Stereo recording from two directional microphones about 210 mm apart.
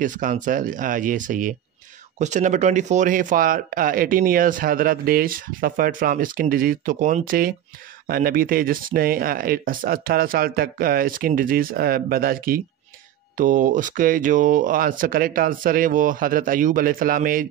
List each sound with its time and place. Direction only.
0.0 s speech: 40° right (ahead or behind)